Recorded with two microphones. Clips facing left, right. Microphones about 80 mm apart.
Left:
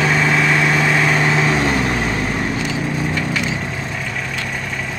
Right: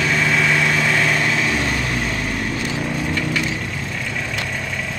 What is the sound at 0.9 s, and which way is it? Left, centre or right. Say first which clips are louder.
Vehicle: left 3 dB; left.